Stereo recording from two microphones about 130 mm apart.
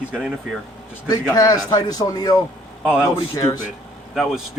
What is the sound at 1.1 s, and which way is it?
Speech, 30° left (ahead or behind).